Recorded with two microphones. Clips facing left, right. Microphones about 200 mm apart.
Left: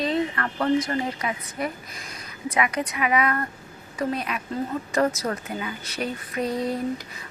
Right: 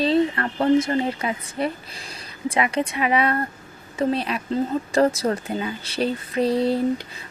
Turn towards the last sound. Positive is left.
turn(degrees=-30)  # may be behind; listen again after turning